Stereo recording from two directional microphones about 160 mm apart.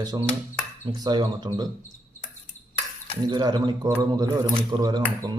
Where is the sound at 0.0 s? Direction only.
25° right (ahead or behind).